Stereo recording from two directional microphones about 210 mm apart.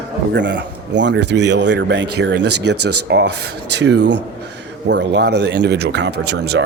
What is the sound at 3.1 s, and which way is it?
Speech, 55° right (ahead or behind).